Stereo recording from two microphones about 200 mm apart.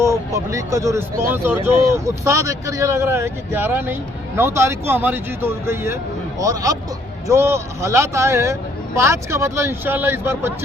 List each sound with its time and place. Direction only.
0.0 s speech: 15° right (ahead or behind)